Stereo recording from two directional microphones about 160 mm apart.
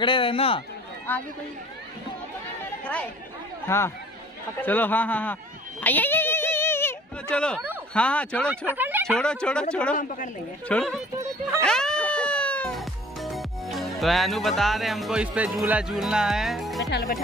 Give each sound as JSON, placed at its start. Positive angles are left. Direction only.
{"t": 0.0, "sound": "a man's voice", "side_deg": 30}
{"t": 2.8, "sound": "speech", "side_deg": 10}
{"t": 8.5, "sound": "speech", "side_deg": -10}
{"t": 9.2, "sound": "speech", "side_deg": 5}
{"t": 9.9, "sound": "speech", "side_deg": 55}
{"t": 10.7, "sound": "speech", "side_deg": 5}
{"t": 11.6, "sound": "music", "side_deg": 5}